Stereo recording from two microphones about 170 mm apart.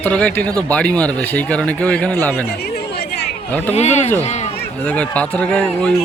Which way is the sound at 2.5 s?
70° left (ahead or behind).